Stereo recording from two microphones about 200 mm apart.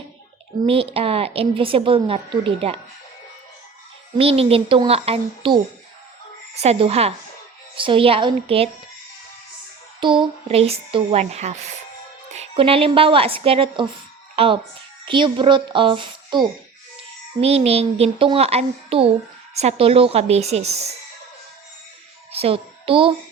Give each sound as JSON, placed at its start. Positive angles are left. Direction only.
{"t": 0.6, "sound": "a woman's voice", "side_deg": -30}
{"t": 4.2, "sound": "a woman's voice", "side_deg": -30}
{"t": 10.0, "sound": "a woman's voice", "side_deg": -25}
{"t": 22.3, "sound": "a child's voice", "side_deg": -30}